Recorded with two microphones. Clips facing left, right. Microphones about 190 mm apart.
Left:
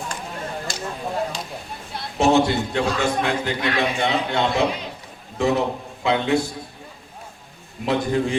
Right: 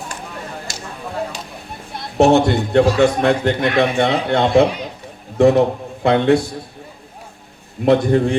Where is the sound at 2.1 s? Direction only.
60° right (ahead or behind).